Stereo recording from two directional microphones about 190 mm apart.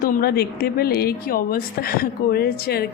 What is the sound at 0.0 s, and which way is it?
A woman's voice, 50° left (ahead or behind).